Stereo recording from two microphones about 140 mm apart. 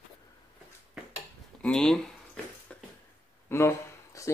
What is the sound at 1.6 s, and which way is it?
Speech, 5° left (ahead or behind).